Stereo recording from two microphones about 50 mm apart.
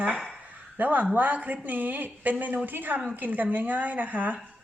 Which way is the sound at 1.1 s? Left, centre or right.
Right.